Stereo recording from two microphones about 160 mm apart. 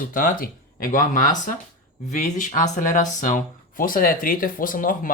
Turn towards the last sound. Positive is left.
turn(degrees=55)  # may be behind; listen again after turning